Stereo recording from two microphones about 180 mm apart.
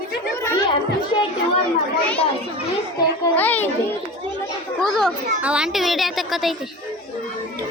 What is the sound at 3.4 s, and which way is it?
Speech, 10° left (ahead or behind).